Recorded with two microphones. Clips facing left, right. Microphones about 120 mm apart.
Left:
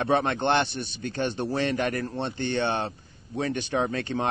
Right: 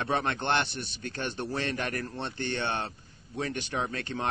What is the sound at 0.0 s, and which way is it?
Speech, 20° left (ahead or behind).